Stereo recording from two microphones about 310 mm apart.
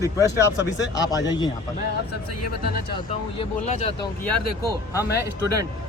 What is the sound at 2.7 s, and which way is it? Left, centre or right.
Speech, left.